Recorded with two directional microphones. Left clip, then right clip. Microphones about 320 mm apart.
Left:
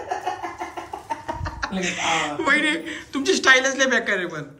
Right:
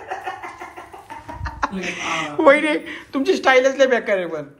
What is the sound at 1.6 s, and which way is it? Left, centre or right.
Speech, centre.